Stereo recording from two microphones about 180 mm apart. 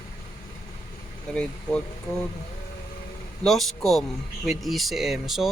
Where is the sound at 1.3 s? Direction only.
5° left (ahead or behind).